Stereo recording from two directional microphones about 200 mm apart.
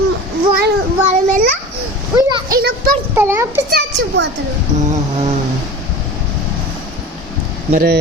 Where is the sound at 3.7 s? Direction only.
55° right (ahead or behind).